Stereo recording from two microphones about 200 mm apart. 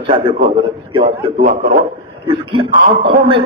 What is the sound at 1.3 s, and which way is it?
Speech, 40° right (ahead or behind).